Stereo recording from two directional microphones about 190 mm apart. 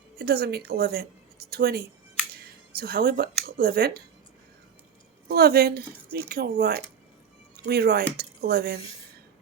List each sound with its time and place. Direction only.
0.2 s speech: 55° right (ahead or behind)
5.3 s speech: 55° right (ahead or behind)